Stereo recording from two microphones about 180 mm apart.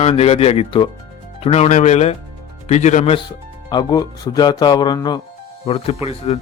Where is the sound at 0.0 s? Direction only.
35° left (ahead or behind).